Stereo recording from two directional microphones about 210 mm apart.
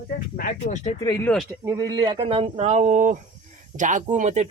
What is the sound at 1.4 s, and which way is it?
Speech, 15° right (ahead or behind).